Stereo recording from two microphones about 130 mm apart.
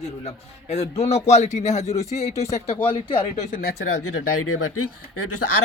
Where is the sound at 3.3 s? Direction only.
85° left.